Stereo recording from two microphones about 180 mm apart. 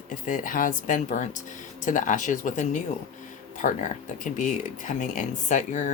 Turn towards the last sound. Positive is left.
turn(degrees=45)  # may be behind; listen again after turning